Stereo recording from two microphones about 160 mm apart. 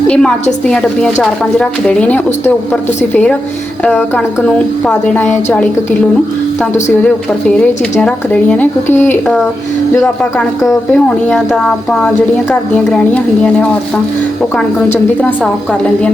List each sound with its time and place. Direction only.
0.1 s a woman's voice: 5° left (ahead or behind)
4.4 s speech: 5° left (ahead or behind)
7.5 s speech: 5° left (ahead or behind)
10.3 s speech: 20° left (ahead or behind)
10.9 s a woman's voice: centre (ahead or behind)